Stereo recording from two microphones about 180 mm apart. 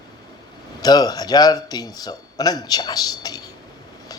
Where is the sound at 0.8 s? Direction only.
20° left (ahead or behind).